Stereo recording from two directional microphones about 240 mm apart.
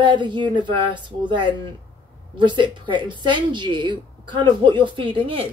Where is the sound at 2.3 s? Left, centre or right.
Centre.